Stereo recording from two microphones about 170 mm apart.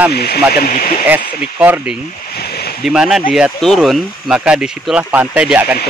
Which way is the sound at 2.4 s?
70° left (ahead or behind).